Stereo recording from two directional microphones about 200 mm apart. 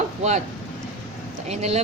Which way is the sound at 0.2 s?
35° right (ahead or behind).